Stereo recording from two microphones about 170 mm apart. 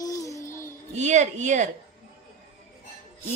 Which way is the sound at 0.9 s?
45° right (ahead or behind).